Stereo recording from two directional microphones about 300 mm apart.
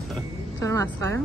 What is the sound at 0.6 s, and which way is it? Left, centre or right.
Speech, centre.